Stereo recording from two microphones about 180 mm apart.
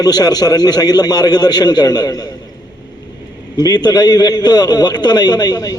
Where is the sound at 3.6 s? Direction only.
20° left (ahead or behind).